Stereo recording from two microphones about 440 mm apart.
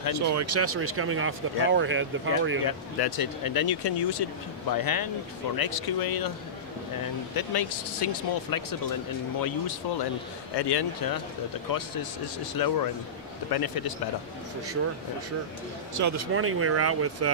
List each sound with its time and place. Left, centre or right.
0.1 s speech: right
3.0 s speech: left
7.3 s speech: left
15.9 s speech: right